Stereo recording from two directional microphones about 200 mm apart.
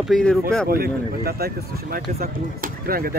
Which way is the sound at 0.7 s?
50° right (ahead or behind).